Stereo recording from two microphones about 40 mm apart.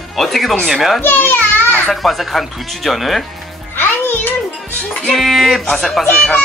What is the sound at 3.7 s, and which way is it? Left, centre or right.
Music, left.